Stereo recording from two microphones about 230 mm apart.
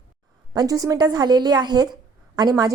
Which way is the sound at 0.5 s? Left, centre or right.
Centre.